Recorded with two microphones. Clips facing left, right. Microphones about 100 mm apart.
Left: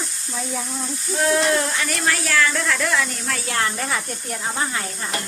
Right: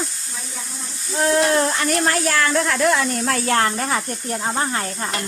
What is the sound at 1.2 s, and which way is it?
Speech, 35° right (ahead or behind).